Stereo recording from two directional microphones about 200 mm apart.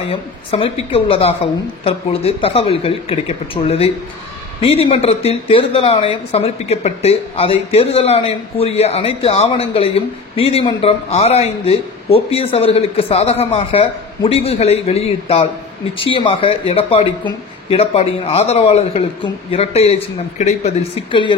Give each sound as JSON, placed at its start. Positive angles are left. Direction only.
{"t": 0.1, "sound": "speech", "side_deg": 30}